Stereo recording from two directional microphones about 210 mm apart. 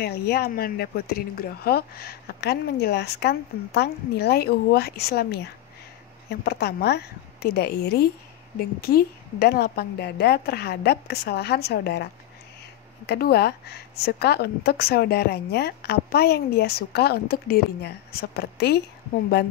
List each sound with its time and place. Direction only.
0.0 s a woman's voice: 50° left (ahead or behind)